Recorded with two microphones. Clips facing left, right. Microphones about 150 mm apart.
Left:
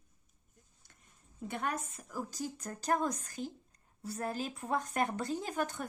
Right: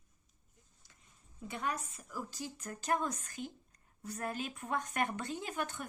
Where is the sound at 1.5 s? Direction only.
55° left (ahead or behind).